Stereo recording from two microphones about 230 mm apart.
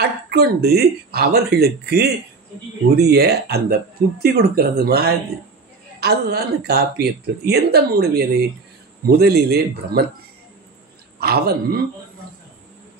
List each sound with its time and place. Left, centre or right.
0.0 s speech: right
11.1 s speech: right